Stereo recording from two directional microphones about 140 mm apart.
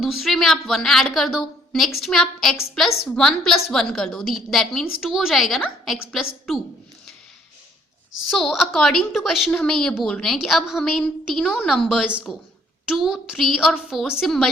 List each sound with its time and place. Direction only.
0.0 s speech: centre (ahead or behind)
8.3 s speech: centre (ahead or behind)